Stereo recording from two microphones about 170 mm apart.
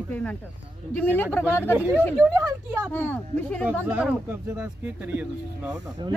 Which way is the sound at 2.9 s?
10° left (ahead or behind).